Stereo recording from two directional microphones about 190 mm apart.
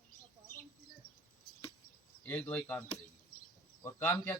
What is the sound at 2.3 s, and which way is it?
Speech, 10° left (ahead or behind).